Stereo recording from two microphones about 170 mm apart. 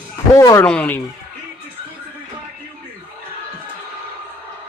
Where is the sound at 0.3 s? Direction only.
15° left (ahead or behind).